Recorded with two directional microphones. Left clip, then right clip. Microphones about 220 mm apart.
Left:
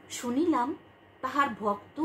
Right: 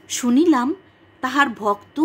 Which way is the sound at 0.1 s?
45° right (ahead or behind).